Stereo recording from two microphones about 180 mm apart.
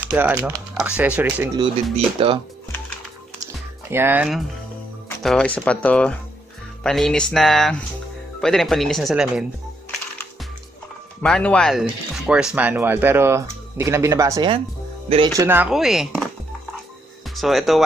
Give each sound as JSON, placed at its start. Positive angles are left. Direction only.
{"t": 0.0, "sound": "speech", "side_deg": -10}
{"t": 2.1, "sound": "speech", "side_deg": -30}
{"t": 3.9, "sound": "speech", "side_deg": -10}
{"t": 11.2, "sound": "speech", "side_deg": 5}
{"t": 15.7, "sound": "speech", "side_deg": 0}
{"t": 17.4, "sound": "speech", "side_deg": 0}